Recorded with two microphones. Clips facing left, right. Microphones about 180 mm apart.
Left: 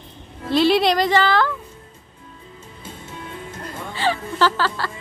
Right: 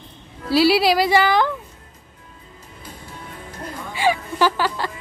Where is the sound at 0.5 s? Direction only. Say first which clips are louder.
Right 1 dB; 5° right (ahead or behind).